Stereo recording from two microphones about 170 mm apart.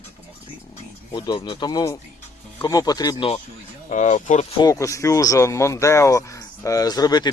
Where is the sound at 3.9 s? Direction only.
45° left (ahead or behind).